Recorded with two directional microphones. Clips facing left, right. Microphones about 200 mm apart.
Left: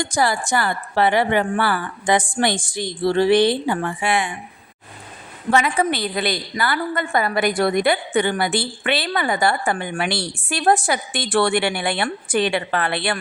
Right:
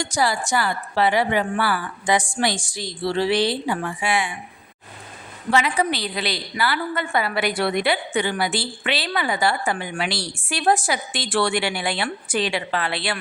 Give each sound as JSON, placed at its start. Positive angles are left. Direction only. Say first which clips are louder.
{"t": 0.0, "sound": "a woman's voice", "louder": "left 2 dB", "side_deg": 55}
{"t": 5.5, "sound": "a woman's voice", "louder": "left 2 dB", "side_deg": 50}